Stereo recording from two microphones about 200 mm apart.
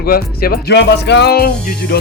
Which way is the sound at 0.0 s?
50° left (ahead or behind).